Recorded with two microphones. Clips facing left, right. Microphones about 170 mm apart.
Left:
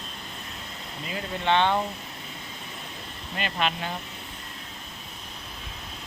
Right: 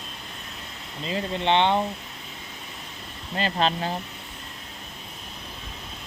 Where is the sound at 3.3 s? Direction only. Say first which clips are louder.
Right 4 dB; 35° right (ahead or behind).